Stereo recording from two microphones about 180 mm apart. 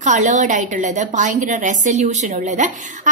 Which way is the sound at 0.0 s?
40° right (ahead or behind).